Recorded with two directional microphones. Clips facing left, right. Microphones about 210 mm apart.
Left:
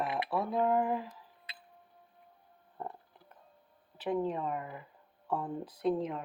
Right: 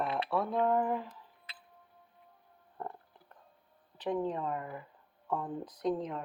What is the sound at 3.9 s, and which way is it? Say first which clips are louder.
Speech: left 1 dB; 10° left (ahead or behind).